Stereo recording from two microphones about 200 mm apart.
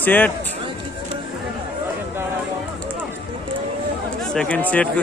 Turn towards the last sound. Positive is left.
turn(degrees=5)  # may be behind; listen again after turning